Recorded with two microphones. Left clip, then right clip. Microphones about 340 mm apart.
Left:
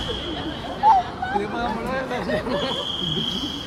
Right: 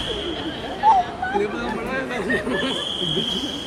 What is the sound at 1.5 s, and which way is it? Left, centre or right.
Chatter, left.